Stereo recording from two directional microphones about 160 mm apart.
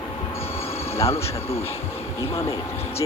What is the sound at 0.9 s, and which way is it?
Speech, 15° left (ahead or behind).